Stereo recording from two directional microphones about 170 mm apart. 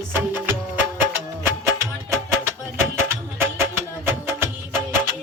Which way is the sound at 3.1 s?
15° right (ahead or behind).